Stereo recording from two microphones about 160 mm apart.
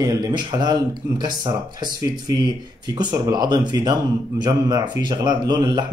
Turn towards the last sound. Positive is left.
turn(degrees=-25)  # may be behind; listen again after turning